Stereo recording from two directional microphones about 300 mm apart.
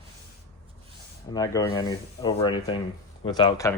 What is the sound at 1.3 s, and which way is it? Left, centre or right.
Speech, centre.